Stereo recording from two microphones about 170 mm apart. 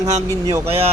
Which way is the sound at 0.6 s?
35° right (ahead or behind).